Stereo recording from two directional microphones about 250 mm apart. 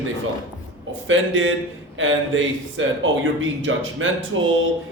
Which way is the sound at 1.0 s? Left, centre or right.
Right.